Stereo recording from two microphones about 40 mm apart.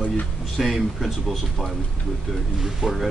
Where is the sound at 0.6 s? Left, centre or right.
Centre.